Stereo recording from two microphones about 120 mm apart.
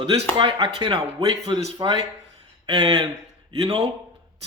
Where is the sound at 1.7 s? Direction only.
35° right (ahead or behind).